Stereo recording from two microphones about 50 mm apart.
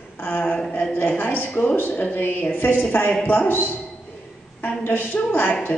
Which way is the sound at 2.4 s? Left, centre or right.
Left.